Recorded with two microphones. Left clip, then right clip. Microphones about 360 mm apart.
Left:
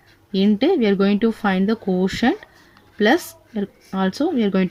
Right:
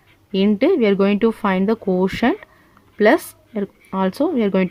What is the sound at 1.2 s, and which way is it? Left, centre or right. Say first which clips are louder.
Speech: right 3 dB; right.